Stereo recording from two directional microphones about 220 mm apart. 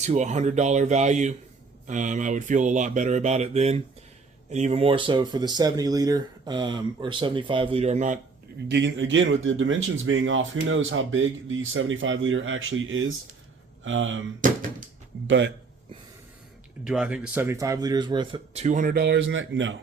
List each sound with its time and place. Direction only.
0.0 s speech: 30° right (ahead or behind)
8.6 s speech: 55° right (ahead or behind)
15.3 s speech: 55° right (ahead or behind)
16.8 s speech: 5° right (ahead or behind); by 19.7 s 55° right (ahead or behind)